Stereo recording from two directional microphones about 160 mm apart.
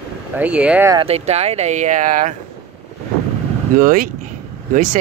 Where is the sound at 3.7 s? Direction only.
60° right (ahead or behind).